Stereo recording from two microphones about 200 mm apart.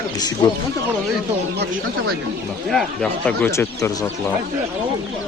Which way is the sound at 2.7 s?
5° left (ahead or behind).